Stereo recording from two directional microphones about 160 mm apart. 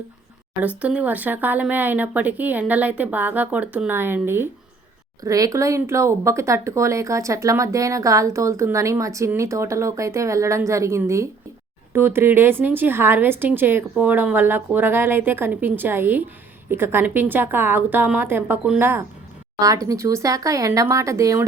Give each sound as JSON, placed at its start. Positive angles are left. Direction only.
{"t": 0.8, "sound": "a woman's voice", "side_deg": -10}